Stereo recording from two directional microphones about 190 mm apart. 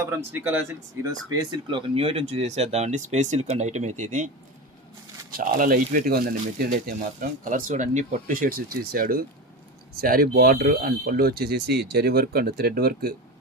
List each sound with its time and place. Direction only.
0.0 s speech: 15° right (ahead or behind)
1.5 s speech: 30° right (ahead or behind)
5.4 s speech: 45° right (ahead or behind)